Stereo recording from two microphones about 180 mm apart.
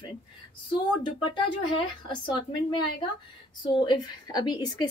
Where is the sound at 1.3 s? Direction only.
25° left (ahead or behind).